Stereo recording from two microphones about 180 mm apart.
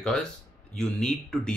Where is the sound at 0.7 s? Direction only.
5° left (ahead or behind).